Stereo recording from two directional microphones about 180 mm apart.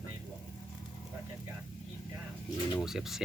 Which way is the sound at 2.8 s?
Centre (ahead or behind).